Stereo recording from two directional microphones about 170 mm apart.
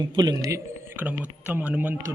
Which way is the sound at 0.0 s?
25° right (ahead or behind).